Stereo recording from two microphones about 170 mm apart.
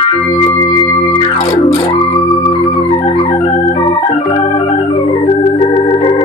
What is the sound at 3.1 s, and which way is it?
Organ, 30° left (ahead or behind).